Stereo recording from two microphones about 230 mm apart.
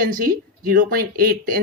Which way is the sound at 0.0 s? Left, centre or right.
Right.